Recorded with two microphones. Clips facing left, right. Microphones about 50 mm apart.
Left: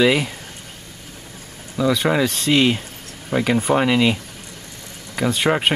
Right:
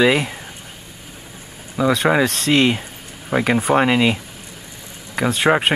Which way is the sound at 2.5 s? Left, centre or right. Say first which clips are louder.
Even; centre.